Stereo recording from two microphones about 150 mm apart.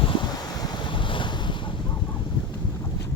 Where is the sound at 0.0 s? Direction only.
35° left (ahead or behind).